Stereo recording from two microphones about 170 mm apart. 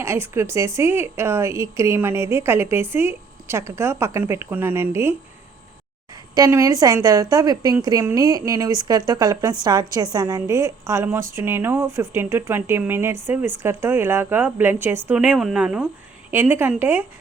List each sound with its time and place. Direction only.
0.0 s a woman's voice: 15° right (ahead or behind)
6.3 s a woman's voice: 20° right (ahead or behind)